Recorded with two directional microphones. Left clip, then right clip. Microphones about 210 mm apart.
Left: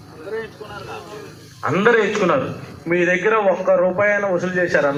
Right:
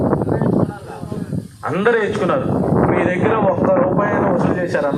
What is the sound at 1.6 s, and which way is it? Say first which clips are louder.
Speech: left 1 dB; 30° left (ahead or behind).